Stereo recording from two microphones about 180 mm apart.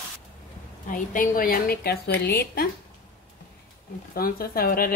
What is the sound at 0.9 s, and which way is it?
A woman's voice, 50° left (ahead or behind).